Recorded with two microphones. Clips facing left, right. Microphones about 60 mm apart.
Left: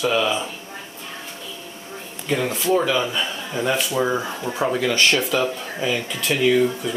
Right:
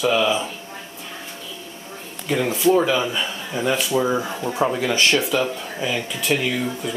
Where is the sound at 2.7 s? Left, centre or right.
Centre.